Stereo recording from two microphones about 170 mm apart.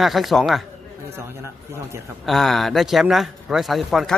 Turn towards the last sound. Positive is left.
turn(degrees=0)  # may be behind; listen again after turning